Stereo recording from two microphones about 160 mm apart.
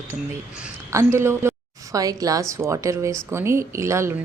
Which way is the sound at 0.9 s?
15° right (ahead or behind).